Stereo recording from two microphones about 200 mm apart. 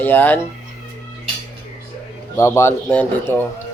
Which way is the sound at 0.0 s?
10° left (ahead or behind).